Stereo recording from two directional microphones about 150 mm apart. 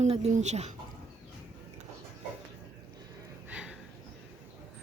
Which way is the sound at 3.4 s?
10° right (ahead or behind).